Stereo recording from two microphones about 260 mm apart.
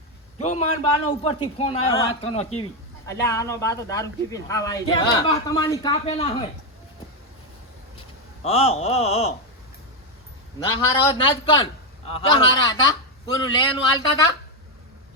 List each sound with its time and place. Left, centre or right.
0.3 s a man's voice: left
3.1 s a man's voice: centre
8.4 s a man's voice: left
10.8 s a man's voice: centre